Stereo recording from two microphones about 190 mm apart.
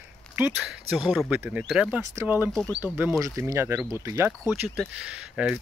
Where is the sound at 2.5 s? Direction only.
5° left (ahead or behind).